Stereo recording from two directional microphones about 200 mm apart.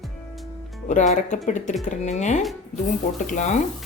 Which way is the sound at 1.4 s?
40° left (ahead or behind).